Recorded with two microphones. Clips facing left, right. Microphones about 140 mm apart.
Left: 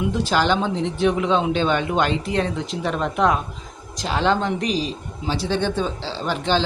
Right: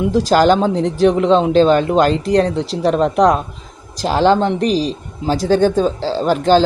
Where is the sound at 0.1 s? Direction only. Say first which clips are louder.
Right 10 dB; 40° right (ahead or behind).